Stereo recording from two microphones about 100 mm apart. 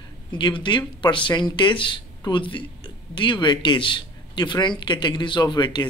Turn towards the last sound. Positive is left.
turn(degrees=50)  # may be behind; listen again after turning